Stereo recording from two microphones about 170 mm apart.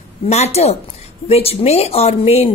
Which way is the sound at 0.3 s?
40° left (ahead or behind).